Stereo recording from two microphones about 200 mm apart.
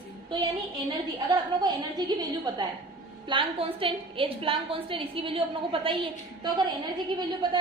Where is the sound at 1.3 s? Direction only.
20° right (ahead or behind).